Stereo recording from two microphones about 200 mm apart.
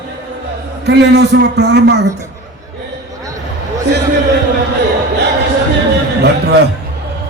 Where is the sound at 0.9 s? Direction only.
55° right (ahead or behind).